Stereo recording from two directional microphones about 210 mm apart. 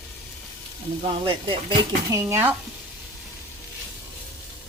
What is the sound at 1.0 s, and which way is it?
Sizzle, 25° right (ahead or behind).